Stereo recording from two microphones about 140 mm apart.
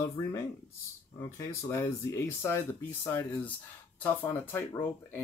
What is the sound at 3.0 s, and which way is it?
Speech, 20° left (ahead or behind).